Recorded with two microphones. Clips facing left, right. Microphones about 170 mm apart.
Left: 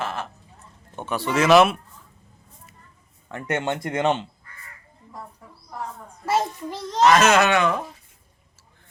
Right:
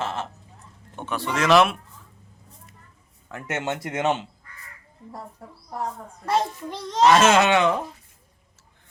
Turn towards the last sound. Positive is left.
turn(degrees=-25)  # may be behind; listen again after turning